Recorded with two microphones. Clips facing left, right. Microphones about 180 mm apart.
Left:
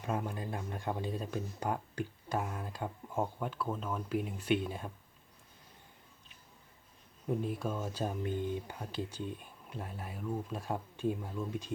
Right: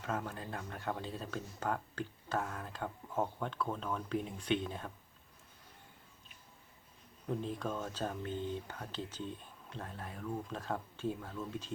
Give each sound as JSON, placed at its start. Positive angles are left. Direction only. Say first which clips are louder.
{"t": 0.0, "sound": "speech", "louder": "left 3 dB", "side_deg": 15}
{"t": 7.3, "sound": "speech", "louder": "left 3 dB", "side_deg": 10}